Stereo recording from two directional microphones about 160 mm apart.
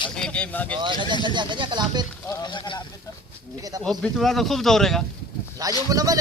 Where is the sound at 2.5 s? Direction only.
30° left (ahead or behind).